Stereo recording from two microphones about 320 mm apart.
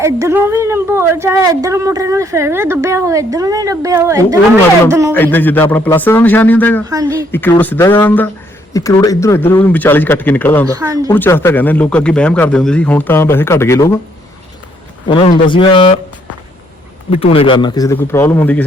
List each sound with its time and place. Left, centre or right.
0.0 s a woman's voice: centre
5.1 s a man's voice: centre
6.9 s a woman's voice: centre
7.3 s a man's voice: centre
10.7 s a woman's voice: centre
11.1 s a man's voice: centre
15.0 s a man's voice: centre
17.1 s a man's voice: centre